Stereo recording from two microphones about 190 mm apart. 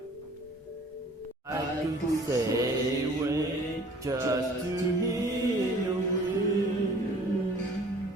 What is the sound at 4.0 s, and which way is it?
Music, 15° right (ahead or behind).